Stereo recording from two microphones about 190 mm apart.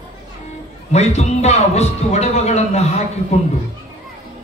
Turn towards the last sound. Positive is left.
turn(degrees=35)  # may be behind; listen again after turning